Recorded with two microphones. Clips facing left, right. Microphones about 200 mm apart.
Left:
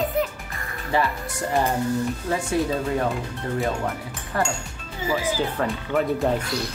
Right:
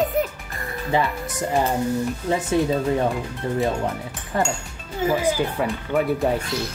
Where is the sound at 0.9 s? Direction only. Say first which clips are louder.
Right 1 dB; 20° right (ahead or behind).